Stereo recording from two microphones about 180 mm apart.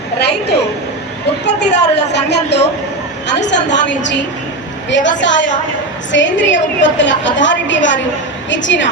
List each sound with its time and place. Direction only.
0.2 s a woman's voice: 65° left (ahead or behind); by 8.9 s 85° left